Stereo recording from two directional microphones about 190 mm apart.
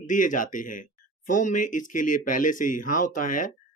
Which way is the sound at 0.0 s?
45° left (ahead or behind).